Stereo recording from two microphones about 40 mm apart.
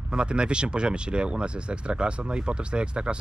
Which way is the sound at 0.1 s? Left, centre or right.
Right.